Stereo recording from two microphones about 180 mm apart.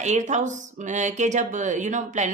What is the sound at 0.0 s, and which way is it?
Speech, 40° right (ahead or behind).